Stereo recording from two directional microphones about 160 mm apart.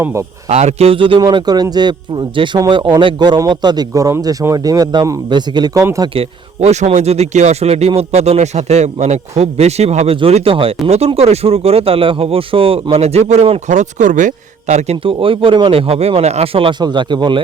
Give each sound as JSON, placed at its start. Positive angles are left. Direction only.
{"t": 0.0, "sound": "speech", "side_deg": -15}
{"t": 0.4, "sound": "speech", "side_deg": -45}
{"t": 6.1, "sound": "speech", "side_deg": -45}